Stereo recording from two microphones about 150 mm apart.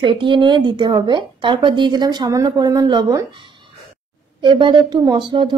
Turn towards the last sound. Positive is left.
turn(degrees=-30)  # may be behind; listen again after turning